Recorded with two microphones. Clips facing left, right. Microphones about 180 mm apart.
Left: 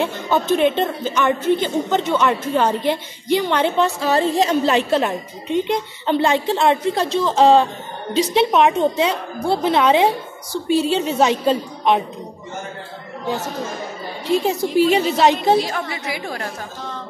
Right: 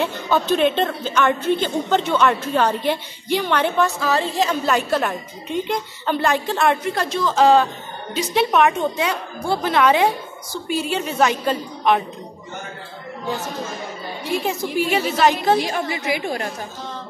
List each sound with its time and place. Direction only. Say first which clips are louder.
0.0 s a woman's voice: left 1 dB; 15° left (ahead or behind)
4.0 s a woman's voice: left 3 dB; 35° left (ahead or behind)
14.4 s a woman's voice: left 6 dB; 25° left (ahead or behind)
15.6 s a woman's voice: right 2 dB; 15° right (ahead or behind)